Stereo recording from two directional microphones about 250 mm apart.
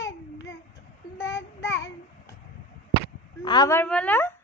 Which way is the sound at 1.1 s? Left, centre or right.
Centre.